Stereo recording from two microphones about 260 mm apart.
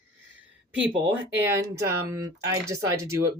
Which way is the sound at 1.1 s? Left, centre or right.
Centre.